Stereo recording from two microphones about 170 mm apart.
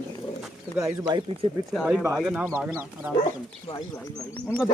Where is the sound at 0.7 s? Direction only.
20° right (ahead or behind).